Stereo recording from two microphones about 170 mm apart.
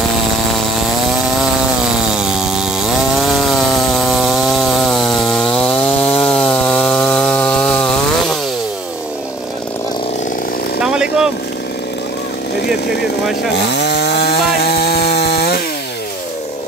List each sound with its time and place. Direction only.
2.1 s chainsaw: 5° right (ahead or behind)
10.8 s chainsaw: 5° right (ahead or behind)
13.6 s chainsaw: 75° left (ahead or behind)